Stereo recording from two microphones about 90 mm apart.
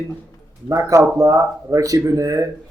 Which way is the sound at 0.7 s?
35° right (ahead or behind).